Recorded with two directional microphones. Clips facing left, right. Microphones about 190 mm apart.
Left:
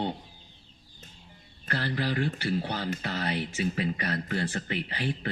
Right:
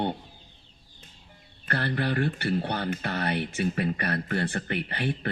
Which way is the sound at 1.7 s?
60° right (ahead or behind).